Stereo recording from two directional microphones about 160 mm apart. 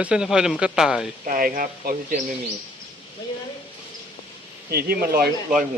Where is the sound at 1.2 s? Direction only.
60° right (ahead or behind).